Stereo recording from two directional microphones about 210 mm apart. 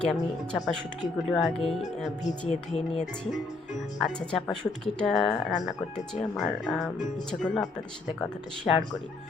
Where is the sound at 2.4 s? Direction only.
30° left (ahead or behind).